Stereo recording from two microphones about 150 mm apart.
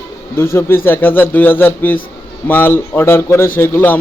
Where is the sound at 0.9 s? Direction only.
10° left (ahead or behind).